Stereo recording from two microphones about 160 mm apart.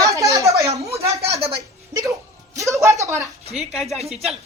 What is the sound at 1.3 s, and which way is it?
Speech, 40° right (ahead or behind).